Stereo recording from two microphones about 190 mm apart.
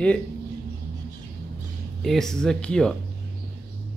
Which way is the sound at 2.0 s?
Centre (ahead or behind).